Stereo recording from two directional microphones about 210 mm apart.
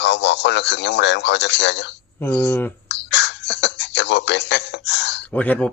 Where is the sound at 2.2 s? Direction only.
10° left (ahead or behind).